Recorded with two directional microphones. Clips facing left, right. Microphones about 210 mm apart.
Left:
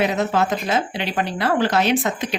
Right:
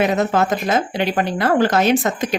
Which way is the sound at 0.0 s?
50° right (ahead or behind).